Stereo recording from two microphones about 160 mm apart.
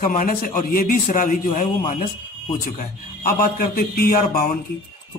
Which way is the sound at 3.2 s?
65° left (ahead or behind).